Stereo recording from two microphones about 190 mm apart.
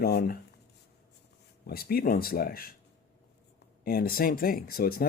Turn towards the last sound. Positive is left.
turn(degrees=50)  # may be behind; listen again after turning